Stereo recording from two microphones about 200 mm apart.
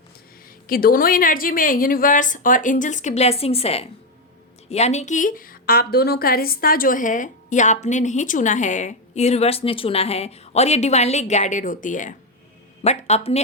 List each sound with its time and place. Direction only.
0.7 s a woman's voice: 45° left (ahead or behind); by 13.4 s 30° left (ahead or behind)